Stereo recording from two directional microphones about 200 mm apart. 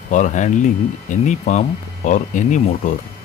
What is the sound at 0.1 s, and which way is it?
Speech, 40° left (ahead or behind).